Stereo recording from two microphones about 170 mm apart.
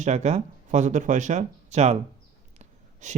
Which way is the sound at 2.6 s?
45° right (ahead or behind).